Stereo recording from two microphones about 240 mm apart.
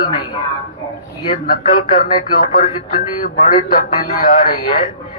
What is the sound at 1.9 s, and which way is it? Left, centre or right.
Speech, left.